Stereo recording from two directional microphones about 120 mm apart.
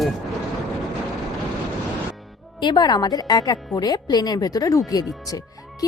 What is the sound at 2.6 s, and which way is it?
A woman's voice, 40° left (ahead or behind).